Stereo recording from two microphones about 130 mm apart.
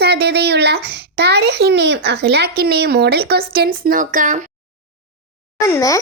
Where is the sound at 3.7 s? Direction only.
90° right.